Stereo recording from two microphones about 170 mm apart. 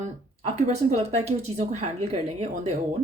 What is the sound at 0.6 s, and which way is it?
Speech, 40° right (ahead or behind).